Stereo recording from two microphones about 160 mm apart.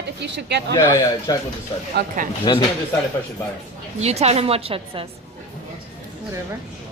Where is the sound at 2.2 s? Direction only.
60° right (ahead or behind).